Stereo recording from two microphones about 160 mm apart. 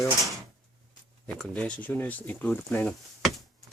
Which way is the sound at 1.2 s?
5° left (ahead or behind).